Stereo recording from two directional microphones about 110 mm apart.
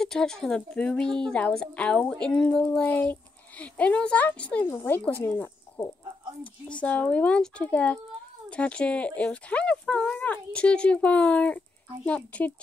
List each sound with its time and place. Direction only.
0.0 s a woman's voice: 5° left (ahead or behind)